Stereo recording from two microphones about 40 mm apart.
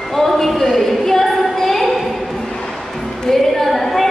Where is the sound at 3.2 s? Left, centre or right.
Centre.